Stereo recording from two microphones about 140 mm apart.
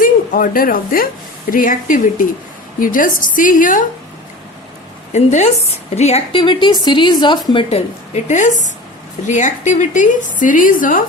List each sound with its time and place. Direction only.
0.0 s a woman's voice: 85° left
5.1 s a woman's voice: 55° left (ahead or behind)
6.4 s a woman's voice: 35° left (ahead or behind)
7.5 s a woman's voice: 50° left (ahead or behind); by 11.0 s 75° left (ahead or behind)